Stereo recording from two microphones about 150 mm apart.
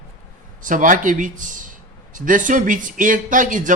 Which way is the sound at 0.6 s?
60° right (ahead or behind).